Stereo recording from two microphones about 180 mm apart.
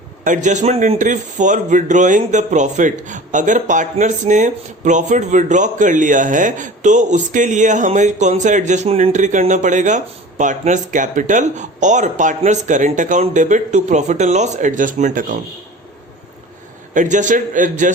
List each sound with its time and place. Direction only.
0.3 s speech: 40° right (ahead or behind)
16.9 s speech: 45° right (ahead or behind)